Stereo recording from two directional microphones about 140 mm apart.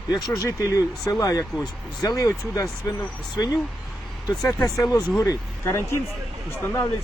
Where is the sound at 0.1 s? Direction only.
25° left (ahead or behind).